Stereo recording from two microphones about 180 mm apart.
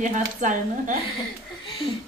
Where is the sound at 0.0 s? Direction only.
45° right (ahead or behind).